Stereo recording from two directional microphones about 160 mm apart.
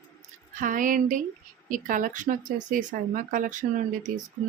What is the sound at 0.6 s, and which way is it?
Speech, 55° right (ahead or behind).